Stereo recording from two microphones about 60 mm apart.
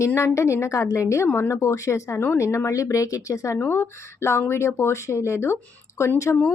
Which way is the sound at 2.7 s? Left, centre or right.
Left.